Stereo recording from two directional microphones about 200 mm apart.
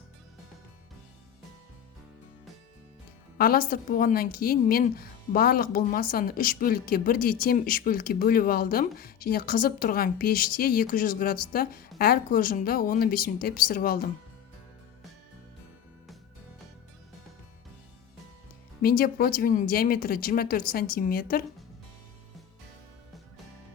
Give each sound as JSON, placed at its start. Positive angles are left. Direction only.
{"t": 3.3, "sound": "a woman's voice", "side_deg": 50}
{"t": 18.8, "sound": "a woman's voice", "side_deg": 50}